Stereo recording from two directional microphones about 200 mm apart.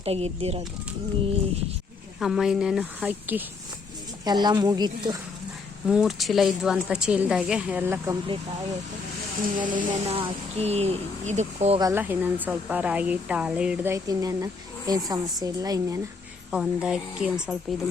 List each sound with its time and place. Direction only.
0.0 s speech: 30° right (ahead or behind)
2.1 s speech: centre (ahead or behind)
4.3 s speech: 20° right (ahead or behind)
5.9 s speech: centre (ahead or behind)
9.6 s speech: 40° right (ahead or behind)
10.2 s speech: 30° right (ahead or behind)
11.8 s speech: 15° right (ahead or behind)
16.5 s speech: 5° right (ahead or behind)